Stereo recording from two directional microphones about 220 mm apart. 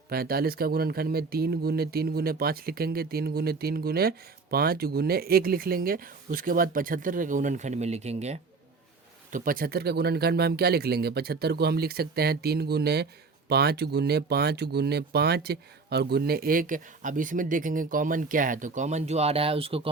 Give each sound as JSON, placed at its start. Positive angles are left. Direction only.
{"t": 0.1, "sound": "speech", "side_deg": -45}